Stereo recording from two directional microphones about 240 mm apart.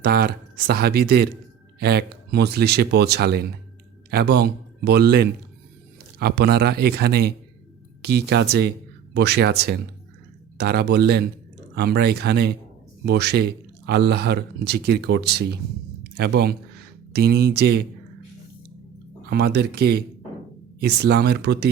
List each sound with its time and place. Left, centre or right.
0.0 s speech: right
19.3 s speech: right